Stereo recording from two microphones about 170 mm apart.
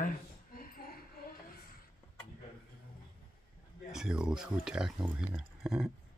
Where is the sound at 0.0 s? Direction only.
60° left (ahead or behind).